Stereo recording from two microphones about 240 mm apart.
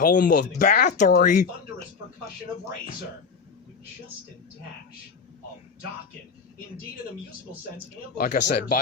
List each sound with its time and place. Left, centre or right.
0.0 s speech: left
8.2 s speech: left